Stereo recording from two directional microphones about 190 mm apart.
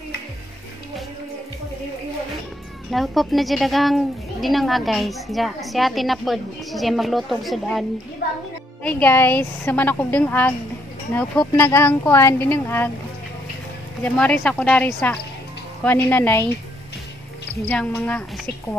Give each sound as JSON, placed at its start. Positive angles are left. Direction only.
{"t": 2.9, "sound": "a woman's voice", "side_deg": 0}
{"t": 8.8, "sound": "speech", "side_deg": 10}
{"t": 14.0, "sound": "speech", "side_deg": 5}
{"t": 17.6, "sound": "speech", "side_deg": 5}